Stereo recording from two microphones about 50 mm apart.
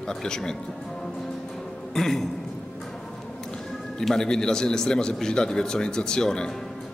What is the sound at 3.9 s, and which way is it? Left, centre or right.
A man's voice, centre.